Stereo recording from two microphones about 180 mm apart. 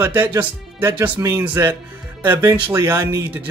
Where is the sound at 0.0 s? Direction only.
10° right (ahead or behind).